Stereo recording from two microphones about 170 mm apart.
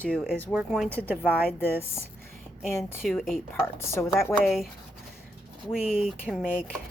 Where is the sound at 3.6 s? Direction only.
15° left (ahead or behind).